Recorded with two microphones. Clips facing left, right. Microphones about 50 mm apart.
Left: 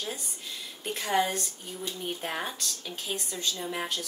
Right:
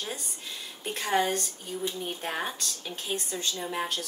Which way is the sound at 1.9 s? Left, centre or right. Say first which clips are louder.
Left 1 dB; centre.